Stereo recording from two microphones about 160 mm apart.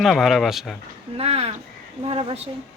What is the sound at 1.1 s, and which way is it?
Speech, 40° right (ahead or behind).